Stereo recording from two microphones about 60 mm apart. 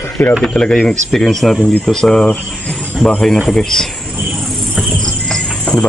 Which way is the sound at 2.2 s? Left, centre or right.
Left.